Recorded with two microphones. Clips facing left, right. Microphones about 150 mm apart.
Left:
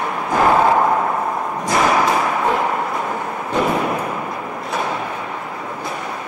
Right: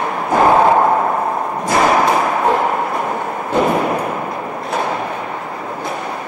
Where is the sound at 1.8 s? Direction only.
20° right (ahead or behind).